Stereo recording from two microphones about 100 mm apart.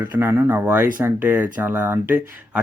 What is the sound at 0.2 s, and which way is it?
Speech, 25° right (ahead or behind).